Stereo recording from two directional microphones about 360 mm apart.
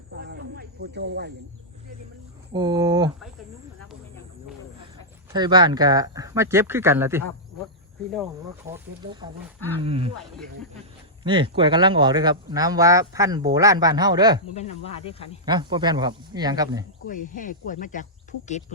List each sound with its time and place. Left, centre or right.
0.2 s snake: right
2.5 s speech: centre
5.3 s speech: centre
9.6 s speech: centre
9.8 s speech: centre
11.2 s speech: centre
14.5 s speech: centre
15.4 s speech: centre
17.1 s speech: left